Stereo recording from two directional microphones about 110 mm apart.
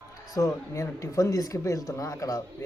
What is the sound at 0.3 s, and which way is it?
Speech, 30° left (ahead or behind).